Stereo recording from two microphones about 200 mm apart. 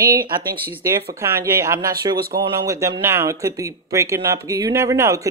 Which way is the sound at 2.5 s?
15° right (ahead or behind).